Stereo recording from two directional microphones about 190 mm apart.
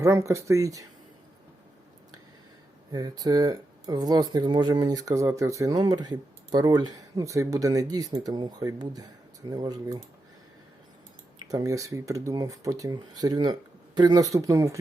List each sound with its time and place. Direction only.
0.0 s speech: 15° right (ahead or behind)
2.9 s speech: 20° right (ahead or behind)
11.4 s speech: 15° right (ahead or behind)